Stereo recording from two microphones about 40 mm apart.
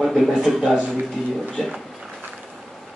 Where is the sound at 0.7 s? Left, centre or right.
Right.